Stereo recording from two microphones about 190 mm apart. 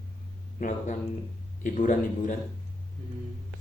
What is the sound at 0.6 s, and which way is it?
Speech, 45° left (ahead or behind).